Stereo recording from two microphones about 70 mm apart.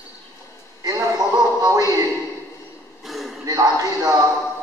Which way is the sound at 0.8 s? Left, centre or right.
Right.